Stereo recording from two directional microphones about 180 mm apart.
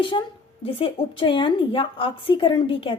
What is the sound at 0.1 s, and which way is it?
A woman's voice, 30° left (ahead or behind).